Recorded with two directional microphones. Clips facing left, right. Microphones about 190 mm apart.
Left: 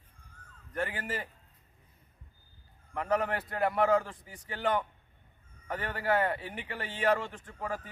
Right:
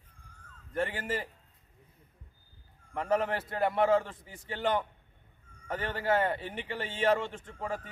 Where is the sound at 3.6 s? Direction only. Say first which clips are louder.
Even; centre (ahead or behind).